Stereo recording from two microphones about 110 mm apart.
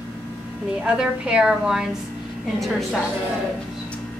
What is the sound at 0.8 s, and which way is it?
A woman's voice, 10° right (ahead or behind).